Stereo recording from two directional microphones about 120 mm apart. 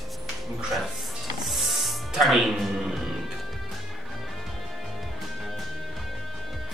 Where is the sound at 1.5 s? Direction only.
Centre (ahead or behind).